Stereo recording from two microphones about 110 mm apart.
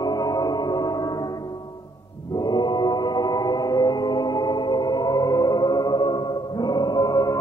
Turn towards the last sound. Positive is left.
turn(degrees=30)  # may be behind; listen again after turning